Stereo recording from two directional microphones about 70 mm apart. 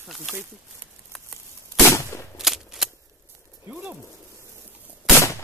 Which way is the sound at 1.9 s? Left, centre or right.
Left.